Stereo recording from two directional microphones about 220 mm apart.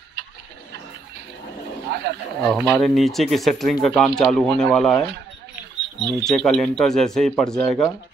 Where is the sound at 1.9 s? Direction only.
50° right (ahead or behind).